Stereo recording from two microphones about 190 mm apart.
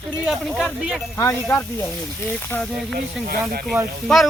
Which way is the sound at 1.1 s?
15° left (ahead or behind).